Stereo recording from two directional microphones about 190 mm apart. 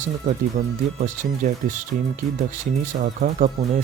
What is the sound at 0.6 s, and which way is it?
Speech, 50° right (ahead or behind).